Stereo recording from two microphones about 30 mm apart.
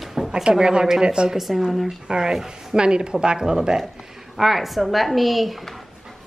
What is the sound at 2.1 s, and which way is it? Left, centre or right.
A woman's voice, right.